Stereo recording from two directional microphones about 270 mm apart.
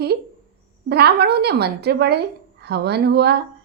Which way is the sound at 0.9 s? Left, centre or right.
Right.